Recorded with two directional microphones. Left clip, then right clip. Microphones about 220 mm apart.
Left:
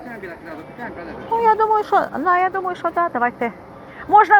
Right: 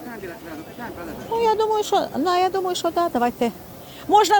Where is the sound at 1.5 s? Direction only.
30° right (ahead or behind).